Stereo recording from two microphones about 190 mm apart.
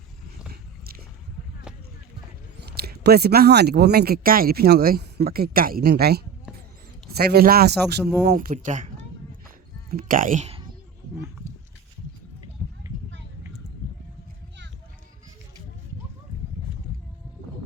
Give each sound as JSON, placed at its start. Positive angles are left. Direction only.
{"t": 2.6, "sound": "speech", "side_deg": -55}
{"t": 9.9, "sound": "speech", "side_deg": -45}